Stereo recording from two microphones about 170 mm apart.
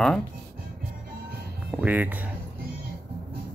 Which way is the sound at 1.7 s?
10° right (ahead or behind).